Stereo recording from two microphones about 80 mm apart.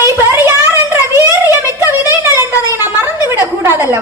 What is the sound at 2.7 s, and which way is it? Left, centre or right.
A woman's voice, right.